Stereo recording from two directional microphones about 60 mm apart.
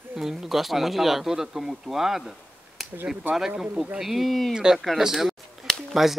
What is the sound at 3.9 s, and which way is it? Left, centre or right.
Speech, centre.